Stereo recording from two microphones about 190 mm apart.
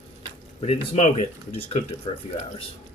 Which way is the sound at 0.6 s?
35° left (ahead or behind).